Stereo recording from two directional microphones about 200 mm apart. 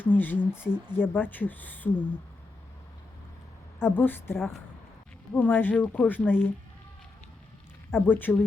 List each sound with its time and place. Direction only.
0.0 s speech: 10° left (ahead or behind)
3.8 s speech: 10° left (ahead or behind)
7.9 s speech: 10° left (ahead or behind)